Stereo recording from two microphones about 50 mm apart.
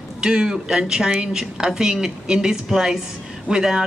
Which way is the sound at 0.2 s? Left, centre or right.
Centre.